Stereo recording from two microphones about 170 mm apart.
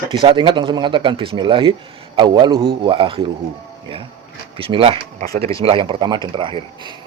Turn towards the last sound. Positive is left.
turn(degrees=-30)  # may be behind; listen again after turning